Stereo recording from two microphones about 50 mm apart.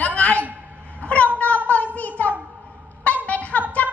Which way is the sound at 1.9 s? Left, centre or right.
Left.